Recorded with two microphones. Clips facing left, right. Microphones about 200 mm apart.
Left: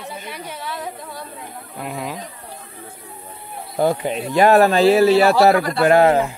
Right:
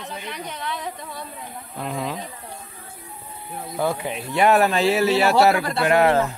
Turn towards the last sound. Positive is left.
turn(degrees=15)  # may be behind; listen again after turning